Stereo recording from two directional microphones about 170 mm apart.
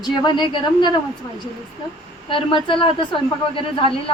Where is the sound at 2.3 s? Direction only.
30° left (ahead or behind).